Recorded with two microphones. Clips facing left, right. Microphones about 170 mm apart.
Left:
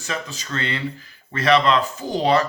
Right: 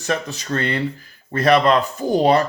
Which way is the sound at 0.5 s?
50° right (ahead or behind).